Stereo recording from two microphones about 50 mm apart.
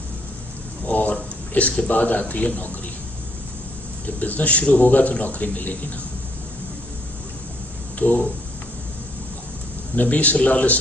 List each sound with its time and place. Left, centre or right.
0.9 s speech: left
4.0 s a man's voice: left
7.9 s a man's voice: left
9.9 s a man's voice: left